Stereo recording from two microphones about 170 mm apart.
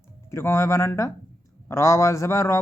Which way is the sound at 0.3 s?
15° left (ahead or behind).